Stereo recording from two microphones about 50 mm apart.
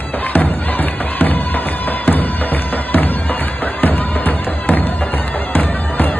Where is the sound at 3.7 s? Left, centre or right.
Left.